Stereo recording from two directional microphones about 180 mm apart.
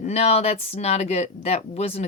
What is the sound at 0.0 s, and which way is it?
Speech, 35° left (ahead or behind).